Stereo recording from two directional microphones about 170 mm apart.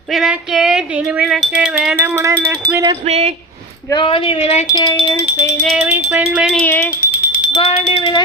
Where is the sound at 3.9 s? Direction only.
30° left (ahead or behind).